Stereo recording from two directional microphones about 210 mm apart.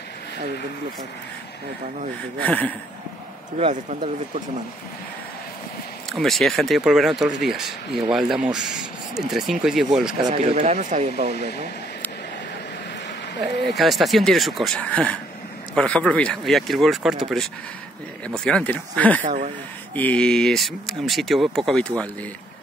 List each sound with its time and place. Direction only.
2.4 s speech: 5° left (ahead or behind)
3.5 s speech: 30° right (ahead or behind)
6.1 s speech: centre (ahead or behind)
10.3 s speech: 30° right (ahead or behind)
13.7 s speech: centre (ahead or behind)
19.2 s speech: 35° right (ahead or behind)
20.0 s speech: 5° left (ahead or behind)